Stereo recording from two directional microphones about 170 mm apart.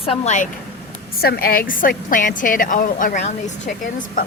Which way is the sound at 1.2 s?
65° left (ahead or behind).